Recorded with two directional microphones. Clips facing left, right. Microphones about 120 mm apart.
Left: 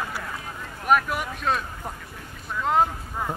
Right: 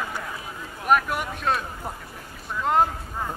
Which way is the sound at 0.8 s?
Centre (ahead or behind).